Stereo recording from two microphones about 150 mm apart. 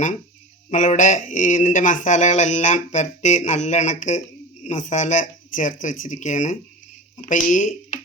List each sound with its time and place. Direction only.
0.7 s speech: 55° left (ahead or behind)